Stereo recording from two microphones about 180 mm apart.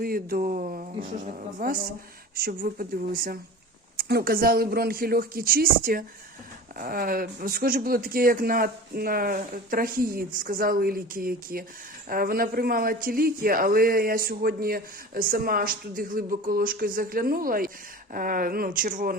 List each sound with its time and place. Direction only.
0.0 s a man's voice: 55° right (ahead or behind)